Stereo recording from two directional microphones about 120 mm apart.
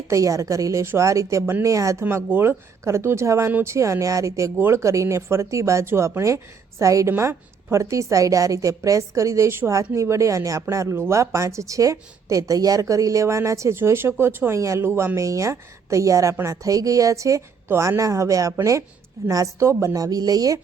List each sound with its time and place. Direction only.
0.1 s a woman's voice: 25° right (ahead or behind)